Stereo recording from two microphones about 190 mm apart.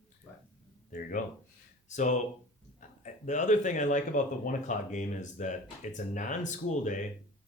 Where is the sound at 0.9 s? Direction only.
45° left (ahead or behind).